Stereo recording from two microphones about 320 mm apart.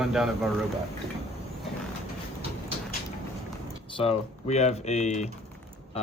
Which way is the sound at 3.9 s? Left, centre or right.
Centre.